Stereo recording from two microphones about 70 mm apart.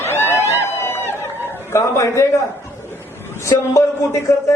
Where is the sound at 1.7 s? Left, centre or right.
Left.